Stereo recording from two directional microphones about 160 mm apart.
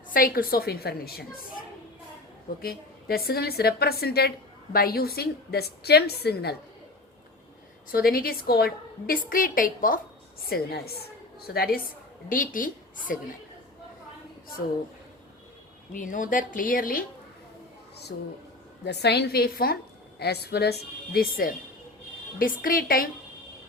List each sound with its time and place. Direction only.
0.1 s a woman's voice: 65° left (ahead or behind)
2.6 s a woman's voice: 75° left (ahead or behind)
7.9 s a woman's voice: 65° left (ahead or behind)
10.5 s a woman's voice: 75° left (ahead or behind)
12.3 s a woman's voice: 55° left (ahead or behind)
15.9 s a woman's voice: 55° left (ahead or behind)
18.1 s a woman's voice: 80° left
18.9 s a woman's voice: 90° left; by 23.0 s 65° left (ahead or behind)